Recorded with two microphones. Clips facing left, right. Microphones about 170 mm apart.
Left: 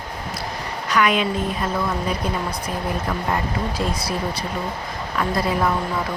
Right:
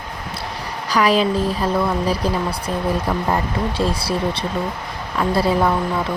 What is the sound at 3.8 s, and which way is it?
Speech, 30° right (ahead or behind).